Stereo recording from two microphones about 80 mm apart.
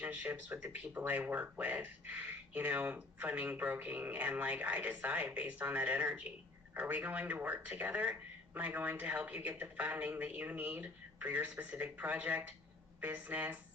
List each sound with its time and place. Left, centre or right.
0.0 s speech: centre